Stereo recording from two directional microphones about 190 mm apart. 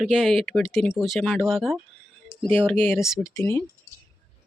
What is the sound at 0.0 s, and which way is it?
Speech, 5° right (ahead or behind).